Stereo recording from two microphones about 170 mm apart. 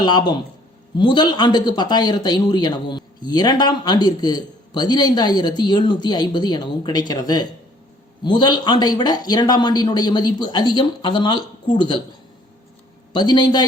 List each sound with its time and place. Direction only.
0.0 s speech: 25° left (ahead or behind)
13.1 s speech: 25° left (ahead or behind)